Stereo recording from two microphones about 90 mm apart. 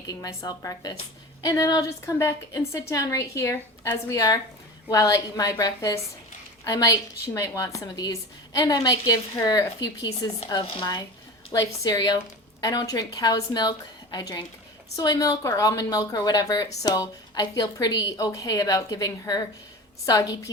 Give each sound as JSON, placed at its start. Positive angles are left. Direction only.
{"t": 0.1, "sound": "a woman's voice", "side_deg": 45}
{"t": 10.6, "sound": "speech", "side_deg": 75}
{"t": 11.5, "sound": "a woman's voice", "side_deg": 45}